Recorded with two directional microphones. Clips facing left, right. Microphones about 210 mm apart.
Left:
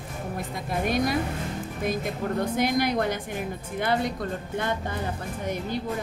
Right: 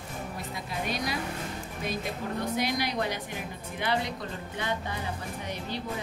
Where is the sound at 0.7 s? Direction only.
50° left (ahead or behind).